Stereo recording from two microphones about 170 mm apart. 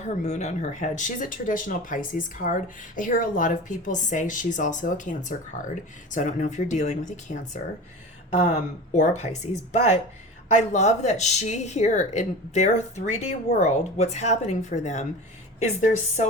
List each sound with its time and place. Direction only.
0.0 s speech: 45° left (ahead or behind)
8.9 s speech: 45° left (ahead or behind)